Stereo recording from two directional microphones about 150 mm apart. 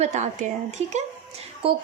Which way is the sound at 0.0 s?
50° right (ahead or behind).